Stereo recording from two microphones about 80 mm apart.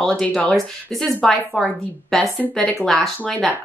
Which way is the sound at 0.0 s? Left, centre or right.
Centre.